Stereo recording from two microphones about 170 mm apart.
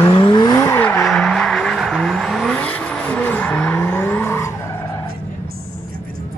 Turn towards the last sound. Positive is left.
turn(degrees=15)  # may be behind; listen again after turning